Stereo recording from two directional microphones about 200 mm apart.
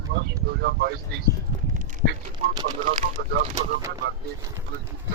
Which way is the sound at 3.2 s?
55° right (ahead or behind).